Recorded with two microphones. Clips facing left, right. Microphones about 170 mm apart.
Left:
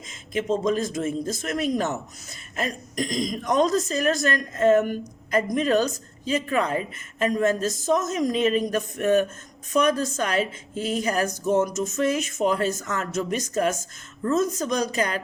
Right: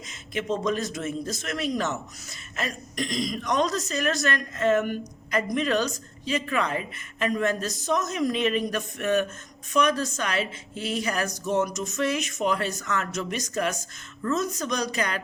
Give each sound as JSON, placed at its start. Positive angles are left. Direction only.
{"t": 0.3, "sound": "a woman's voice", "side_deg": 35}
{"t": 14.2, "sound": "a woman's voice", "side_deg": 30}